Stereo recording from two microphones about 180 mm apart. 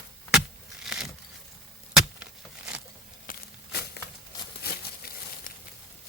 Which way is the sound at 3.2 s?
60° left (ahead or behind).